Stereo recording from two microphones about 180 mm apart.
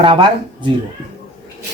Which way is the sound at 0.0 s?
25° right (ahead or behind).